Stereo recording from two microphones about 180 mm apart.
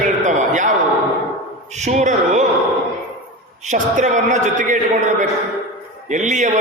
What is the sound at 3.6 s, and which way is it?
A man's voice, 45° right (ahead or behind).